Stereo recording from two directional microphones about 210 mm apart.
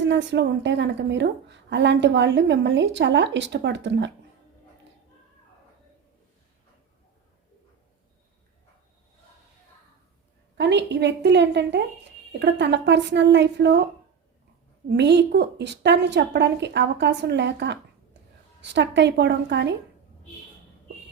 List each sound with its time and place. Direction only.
0.0 s a woman's voice: 60° right (ahead or behind)
10.6 s a woman's voice: 55° right (ahead or behind)
14.8 s a woman's voice: 55° right (ahead or behind)